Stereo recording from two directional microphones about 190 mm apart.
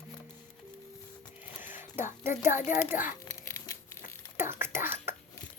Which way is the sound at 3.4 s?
15° left (ahead or behind).